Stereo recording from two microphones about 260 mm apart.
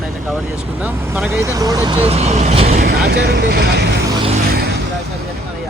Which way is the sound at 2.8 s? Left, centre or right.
Right.